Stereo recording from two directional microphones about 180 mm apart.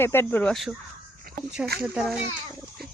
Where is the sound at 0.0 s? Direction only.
10° left (ahead or behind).